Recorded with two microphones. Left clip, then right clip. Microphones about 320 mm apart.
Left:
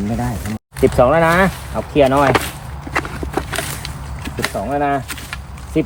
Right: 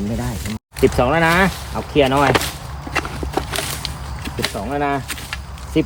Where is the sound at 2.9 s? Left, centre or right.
Centre.